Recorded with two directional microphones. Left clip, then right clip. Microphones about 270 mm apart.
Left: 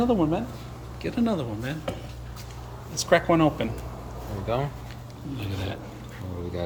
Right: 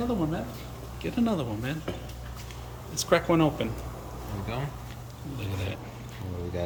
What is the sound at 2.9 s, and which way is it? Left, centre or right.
Speech, centre.